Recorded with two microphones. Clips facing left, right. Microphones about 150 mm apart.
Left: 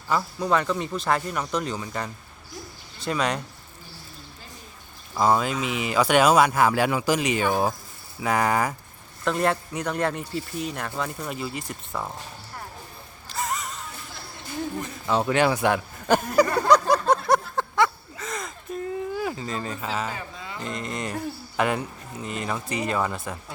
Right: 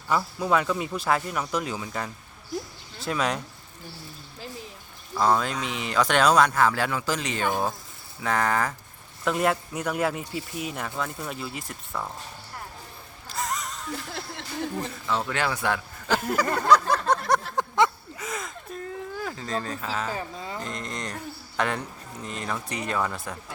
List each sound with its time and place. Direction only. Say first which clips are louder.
0.1 s speech: even; 5° right (ahead or behind)
5.2 s speech: left 2 dB; 5° left (ahead or behind)
9.2 s speech: left 1 dB; 5° right (ahead or behind)
13.2 s gasp: left 1 dB; centre (ahead or behind)
15.0 s speech: left 7 dB; 20° left (ahead or behind)
16.6 s a sound: left 2 dB; 15° left (ahead or behind)
17.6 s a sound: even; 15° right (ahead or behind)
18.3 s a sound: left 2 dB; centre (ahead or behind)
20.6 s speech: left 6 dB; 5° left (ahead or behind)